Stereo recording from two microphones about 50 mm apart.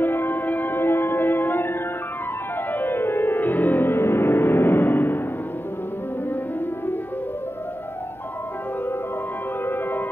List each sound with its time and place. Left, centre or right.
0.0 s music: left